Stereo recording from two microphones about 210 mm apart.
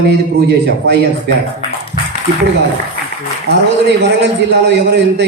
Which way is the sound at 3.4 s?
55° right (ahead or behind).